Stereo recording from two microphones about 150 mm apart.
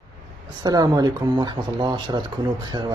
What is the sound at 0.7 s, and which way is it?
Speech, 25° right (ahead or behind).